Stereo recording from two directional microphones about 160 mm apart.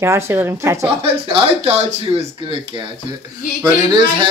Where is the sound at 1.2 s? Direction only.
35° right (ahead or behind).